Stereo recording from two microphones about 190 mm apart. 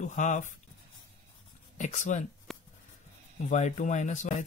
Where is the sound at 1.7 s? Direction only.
40° left (ahead or behind).